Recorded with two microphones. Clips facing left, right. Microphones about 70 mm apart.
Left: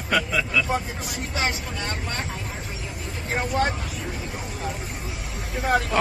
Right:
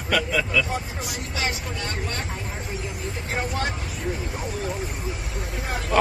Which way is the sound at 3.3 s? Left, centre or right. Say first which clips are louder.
Left 4 dB; left.